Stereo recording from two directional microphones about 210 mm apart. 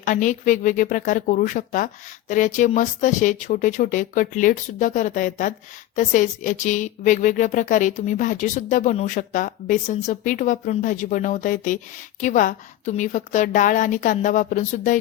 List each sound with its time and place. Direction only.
0.0 s speech: 35° left (ahead or behind)